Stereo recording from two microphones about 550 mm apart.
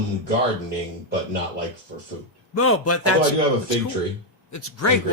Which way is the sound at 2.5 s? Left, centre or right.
Left.